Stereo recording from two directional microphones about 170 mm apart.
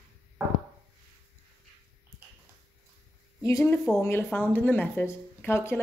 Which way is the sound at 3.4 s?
15° left (ahead or behind).